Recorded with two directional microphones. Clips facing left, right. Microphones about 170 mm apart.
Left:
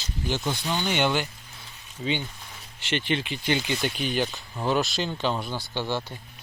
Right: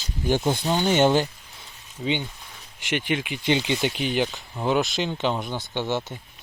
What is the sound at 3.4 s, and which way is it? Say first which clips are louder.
Speech: right 6 dB; 25° right (ahead or behind).